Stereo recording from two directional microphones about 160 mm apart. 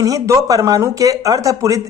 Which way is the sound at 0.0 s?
20° right (ahead or behind).